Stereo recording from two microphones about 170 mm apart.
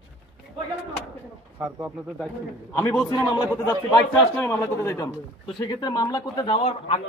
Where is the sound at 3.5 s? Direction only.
15° left (ahead or behind); by 7.0 s 35° left (ahead or behind).